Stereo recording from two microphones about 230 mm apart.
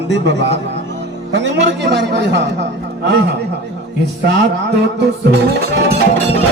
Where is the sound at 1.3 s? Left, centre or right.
Right.